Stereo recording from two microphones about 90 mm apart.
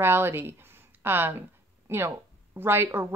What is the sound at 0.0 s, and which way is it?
Speech, 25° right (ahead or behind).